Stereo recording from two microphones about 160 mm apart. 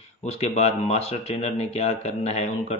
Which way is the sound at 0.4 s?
40° left (ahead or behind).